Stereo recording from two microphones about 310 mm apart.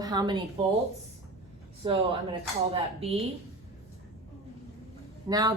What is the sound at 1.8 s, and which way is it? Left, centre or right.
Speech, centre.